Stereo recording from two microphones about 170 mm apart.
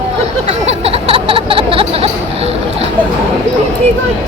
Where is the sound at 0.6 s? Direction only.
35° right (ahead or behind).